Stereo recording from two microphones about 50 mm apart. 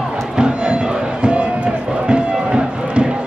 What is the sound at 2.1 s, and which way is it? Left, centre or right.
Music, centre.